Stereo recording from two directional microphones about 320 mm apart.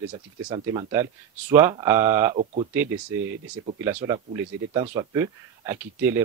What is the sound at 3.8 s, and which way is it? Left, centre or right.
Speech, centre.